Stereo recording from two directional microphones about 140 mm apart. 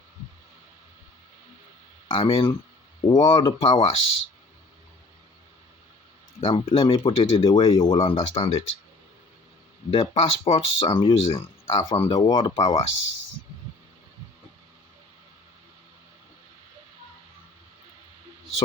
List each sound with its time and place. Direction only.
2.0 s speech: 40° left (ahead or behind)
6.4 s speech: 40° left (ahead or behind)
9.9 s speech: 40° left (ahead or behind)
12.5 s speech: 50° left (ahead or behind)